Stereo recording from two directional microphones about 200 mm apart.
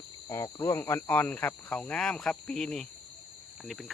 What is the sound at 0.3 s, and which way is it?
Speech, 15° left (ahead or behind).